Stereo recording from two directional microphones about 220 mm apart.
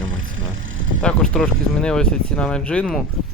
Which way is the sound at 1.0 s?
5° left (ahead or behind).